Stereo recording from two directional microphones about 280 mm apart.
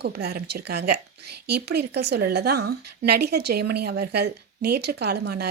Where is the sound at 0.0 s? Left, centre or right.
Right.